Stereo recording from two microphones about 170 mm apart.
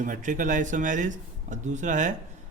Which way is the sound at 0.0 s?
50° right (ahead or behind).